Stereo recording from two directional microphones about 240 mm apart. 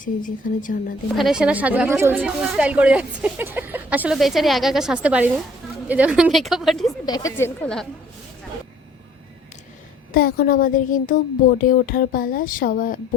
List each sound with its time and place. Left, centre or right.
0.0 s speech: left
1.1 s speech: centre
7.0 s a woman's voice: centre
10.1 s speech: left